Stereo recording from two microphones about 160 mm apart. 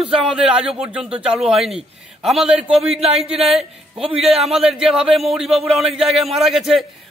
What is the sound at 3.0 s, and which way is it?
Speech, 40° right (ahead or behind).